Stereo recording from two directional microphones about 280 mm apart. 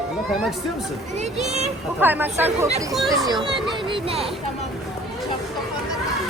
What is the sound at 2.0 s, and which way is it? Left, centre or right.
Speech, centre.